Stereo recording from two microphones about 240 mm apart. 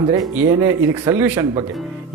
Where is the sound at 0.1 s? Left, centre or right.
Centre.